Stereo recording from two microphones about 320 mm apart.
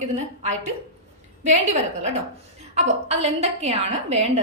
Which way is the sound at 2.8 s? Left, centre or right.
Centre.